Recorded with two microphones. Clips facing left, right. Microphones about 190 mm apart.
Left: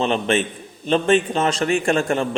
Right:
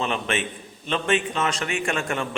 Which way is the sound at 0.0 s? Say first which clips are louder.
Left 7 dB; 30° left (ahead or behind).